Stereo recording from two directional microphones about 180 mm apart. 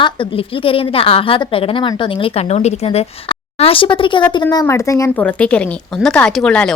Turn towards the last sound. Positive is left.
turn(degrees=5)  # may be behind; listen again after turning